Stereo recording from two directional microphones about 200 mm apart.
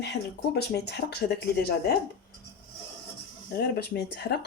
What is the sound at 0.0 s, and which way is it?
Speech, 55° left (ahead or behind).